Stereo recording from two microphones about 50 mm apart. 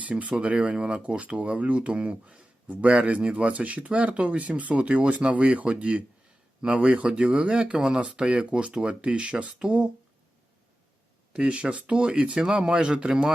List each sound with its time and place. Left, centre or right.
0.0 s speech: right
11.3 s speech: right